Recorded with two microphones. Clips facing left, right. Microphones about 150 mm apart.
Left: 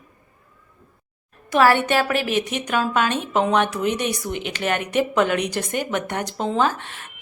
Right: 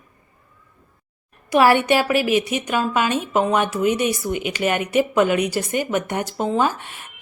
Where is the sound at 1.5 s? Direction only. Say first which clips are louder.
Right 2 dB; 15° right (ahead or behind).